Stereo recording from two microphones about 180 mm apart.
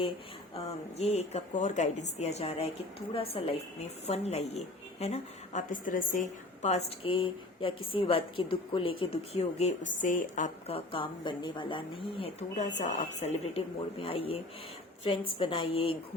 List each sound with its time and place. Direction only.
0.5 s a woman's voice: 35° left (ahead or behind)
10.8 s a woman's voice: 30° left (ahead or behind)